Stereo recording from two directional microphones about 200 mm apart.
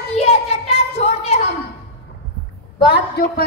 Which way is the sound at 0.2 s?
30° left (ahead or behind).